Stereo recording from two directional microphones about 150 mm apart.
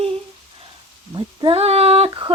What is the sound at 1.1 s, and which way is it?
Speech, 35° right (ahead or behind).